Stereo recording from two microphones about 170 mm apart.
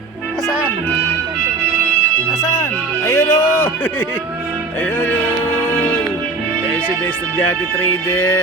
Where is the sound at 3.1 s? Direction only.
15° left (ahead or behind).